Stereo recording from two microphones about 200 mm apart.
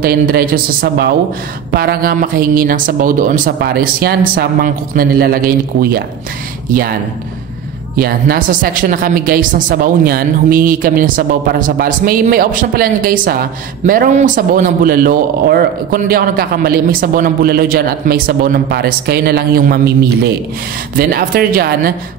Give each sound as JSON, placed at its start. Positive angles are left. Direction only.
{"t": 0.0, "sound": "a woman's voice", "side_deg": -50}
{"t": 20.9, "sound": "a woman's voice", "side_deg": -45}